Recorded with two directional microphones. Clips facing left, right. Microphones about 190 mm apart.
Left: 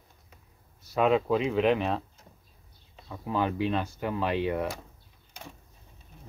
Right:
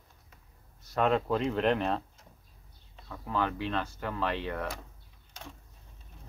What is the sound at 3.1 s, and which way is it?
Speech, 15° left (ahead or behind).